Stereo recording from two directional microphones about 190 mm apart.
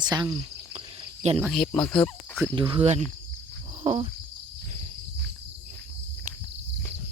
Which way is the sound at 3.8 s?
30° right (ahead or behind).